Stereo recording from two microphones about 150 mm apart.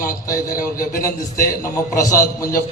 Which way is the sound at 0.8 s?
70° left (ahead or behind).